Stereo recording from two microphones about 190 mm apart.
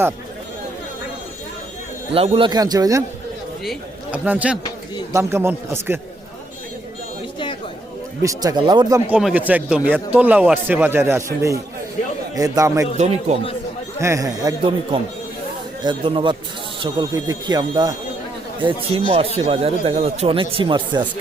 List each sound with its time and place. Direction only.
2.1 s speech: 30° right (ahead or behind)
3.6 s a man's voice: centre (ahead or behind)
8.2 s speech: 15° right (ahead or behind)
9.0 s speech: 10° right (ahead or behind)
13.0 s a man's voice: 35° right (ahead or behind)
14.0 s speech: 15° right (ahead or behind)
15.8 s speech: 25° right (ahead or behind)